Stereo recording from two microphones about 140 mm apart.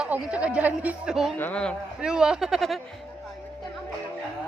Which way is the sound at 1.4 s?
10° left (ahead or behind).